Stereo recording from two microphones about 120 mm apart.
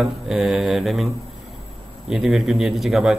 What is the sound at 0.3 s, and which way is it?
Speech, 5° right (ahead or behind).